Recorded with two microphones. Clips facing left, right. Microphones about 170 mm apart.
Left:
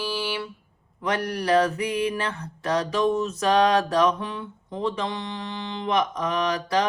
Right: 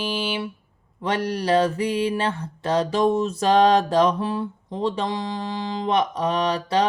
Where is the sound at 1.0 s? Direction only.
25° right (ahead or behind).